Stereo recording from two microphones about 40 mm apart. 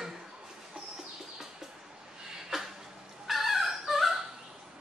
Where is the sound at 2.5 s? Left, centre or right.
Centre.